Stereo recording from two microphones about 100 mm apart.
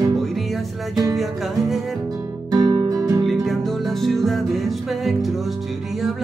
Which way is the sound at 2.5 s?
45° right (ahead or behind).